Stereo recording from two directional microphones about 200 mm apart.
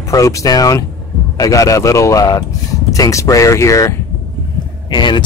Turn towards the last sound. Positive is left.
turn(degrees=25)  # may be behind; listen again after turning